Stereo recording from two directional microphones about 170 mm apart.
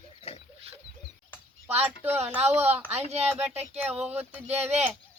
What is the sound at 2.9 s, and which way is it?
Speech, 40° right (ahead or behind).